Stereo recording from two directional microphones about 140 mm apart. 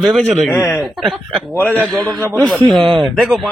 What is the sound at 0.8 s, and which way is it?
Speech, centre (ahead or behind).